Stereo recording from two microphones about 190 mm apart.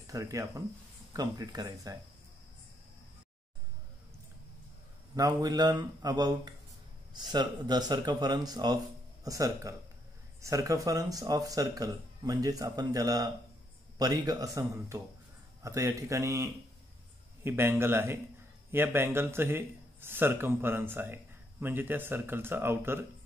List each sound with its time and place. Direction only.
0.0 s a man's voice: 15° right (ahead or behind)
5.1 s a man's voice: 20° right (ahead or behind)